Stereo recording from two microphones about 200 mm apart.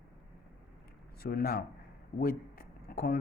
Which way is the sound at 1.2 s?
50° left (ahead or behind).